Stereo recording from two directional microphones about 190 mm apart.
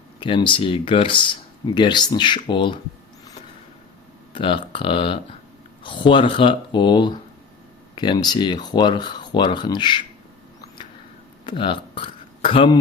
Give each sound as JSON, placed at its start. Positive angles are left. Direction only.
{"t": 0.2, "sound": "speech", "side_deg": 25}
{"t": 4.4, "sound": "speech", "side_deg": 25}
{"t": 11.4, "sound": "speech", "side_deg": 25}